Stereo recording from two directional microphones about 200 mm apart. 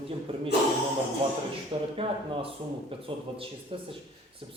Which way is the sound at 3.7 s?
25° right (ahead or behind).